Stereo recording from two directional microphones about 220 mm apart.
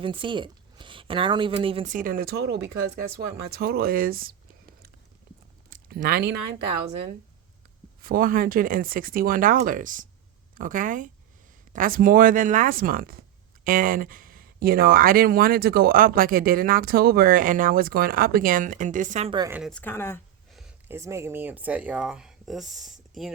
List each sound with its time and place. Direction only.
0.0 s a woman's voice: 25° right (ahead or behind)
1.9 s speech: 40° right (ahead or behind)
5.7 s speech: 40° right (ahead or behind)
8.0 s speech: 40° right (ahead or behind)
19.3 s speech: 20° right (ahead or behind)
19.5 s speech: centre (ahead or behind)
20.5 s speech: centre (ahead or behind)